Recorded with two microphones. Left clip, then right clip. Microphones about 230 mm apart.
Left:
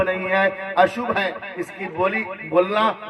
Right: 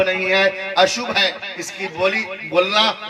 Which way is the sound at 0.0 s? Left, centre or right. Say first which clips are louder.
Right 3 dB; right.